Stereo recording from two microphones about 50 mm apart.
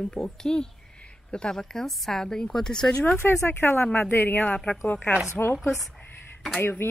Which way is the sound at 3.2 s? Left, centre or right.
Left.